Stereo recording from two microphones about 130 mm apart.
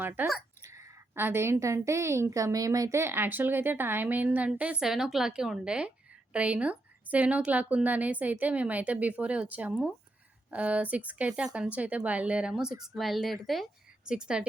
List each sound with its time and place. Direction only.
0.0 s a woman's voice: 15° right (ahead or behind)